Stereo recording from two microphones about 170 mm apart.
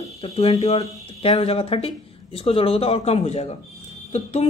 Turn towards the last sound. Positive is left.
turn(degrees=40)  # may be behind; listen again after turning